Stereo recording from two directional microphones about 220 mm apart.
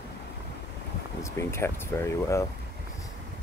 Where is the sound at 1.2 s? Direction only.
10° left (ahead or behind).